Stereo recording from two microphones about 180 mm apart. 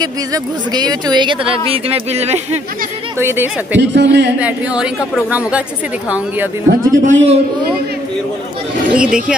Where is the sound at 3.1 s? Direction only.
10° right (ahead or behind).